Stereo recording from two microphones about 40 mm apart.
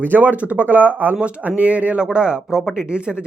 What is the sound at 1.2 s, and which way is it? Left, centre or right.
Speech, right.